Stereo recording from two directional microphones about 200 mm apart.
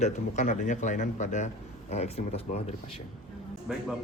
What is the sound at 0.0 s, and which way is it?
Speech, 35° left (ahead or behind).